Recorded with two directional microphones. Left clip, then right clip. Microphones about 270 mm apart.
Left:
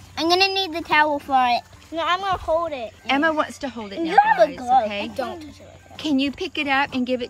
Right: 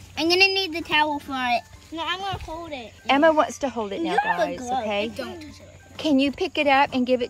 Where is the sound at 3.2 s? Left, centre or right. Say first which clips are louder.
Right 5 dB; right.